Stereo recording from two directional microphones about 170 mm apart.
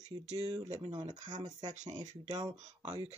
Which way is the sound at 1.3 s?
25° right (ahead or behind).